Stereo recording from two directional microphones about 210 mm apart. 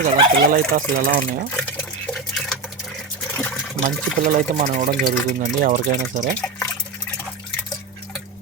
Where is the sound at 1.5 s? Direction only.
5° left (ahead or behind).